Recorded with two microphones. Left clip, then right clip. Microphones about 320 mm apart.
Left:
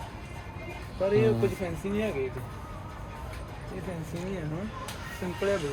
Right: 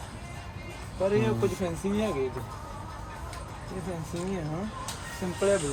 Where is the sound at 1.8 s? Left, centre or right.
Right.